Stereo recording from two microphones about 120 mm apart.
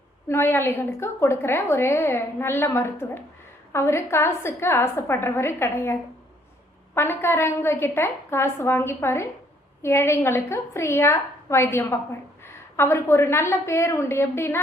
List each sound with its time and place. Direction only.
0.3 s a woman's voice: 20° left (ahead or behind)